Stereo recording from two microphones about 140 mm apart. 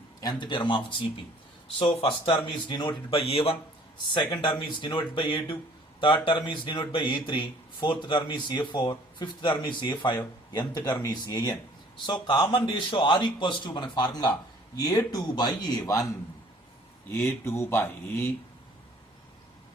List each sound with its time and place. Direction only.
0.2 s speech: 30° left (ahead or behind)